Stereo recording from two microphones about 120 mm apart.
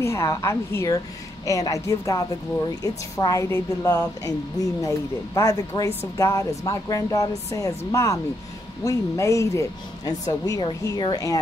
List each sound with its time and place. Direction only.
0.0 s a woman's voice: 25° left (ahead or behind)